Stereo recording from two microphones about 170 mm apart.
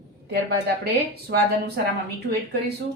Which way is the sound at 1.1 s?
70° right (ahead or behind).